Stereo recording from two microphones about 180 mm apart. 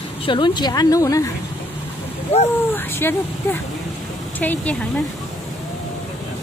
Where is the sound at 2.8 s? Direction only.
10° left (ahead or behind).